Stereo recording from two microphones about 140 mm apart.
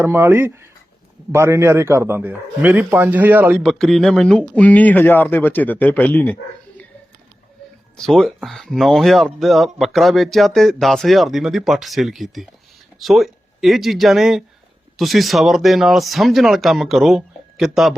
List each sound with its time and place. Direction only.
0.0 s a man's voice: 15° right (ahead or behind)
3.6 s speech: centre (ahead or behind)
7.9 s speech: 5° left (ahead or behind)